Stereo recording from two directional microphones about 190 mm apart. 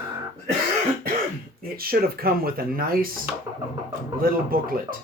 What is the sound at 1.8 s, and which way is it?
Speech, 55° right (ahead or behind).